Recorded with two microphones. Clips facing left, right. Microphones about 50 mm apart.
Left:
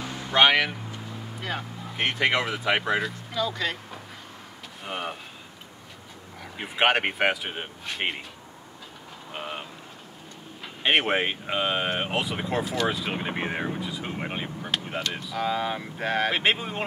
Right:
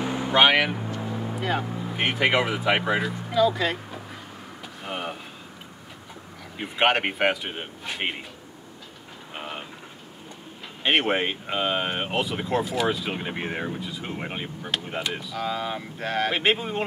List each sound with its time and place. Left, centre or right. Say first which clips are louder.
0.0 s a sound: right 7 dB; right
0.3 s speech: right 1 dB; centre
6.5 s speech: right 1 dB; centre
9.3 s vehicle: left 1 dB; centre
10.8 s speech: even; centre